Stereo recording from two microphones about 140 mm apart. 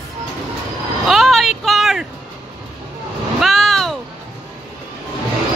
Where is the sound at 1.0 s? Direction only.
Centre (ahead or behind).